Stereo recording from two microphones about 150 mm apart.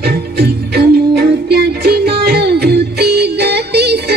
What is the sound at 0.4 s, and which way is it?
Music, 90° right.